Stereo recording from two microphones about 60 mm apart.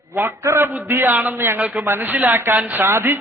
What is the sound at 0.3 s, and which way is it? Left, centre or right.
Speech, right.